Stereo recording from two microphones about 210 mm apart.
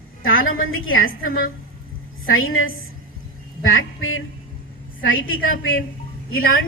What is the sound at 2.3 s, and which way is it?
A woman's voice, 75° left (ahead or behind).